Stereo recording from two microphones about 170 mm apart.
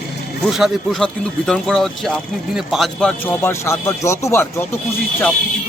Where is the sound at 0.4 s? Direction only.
Centre (ahead or behind).